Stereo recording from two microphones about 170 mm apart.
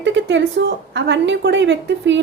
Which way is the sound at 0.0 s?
90° right.